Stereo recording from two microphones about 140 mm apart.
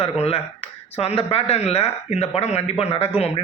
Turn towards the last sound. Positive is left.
turn(degrees=45)  # may be behind; listen again after turning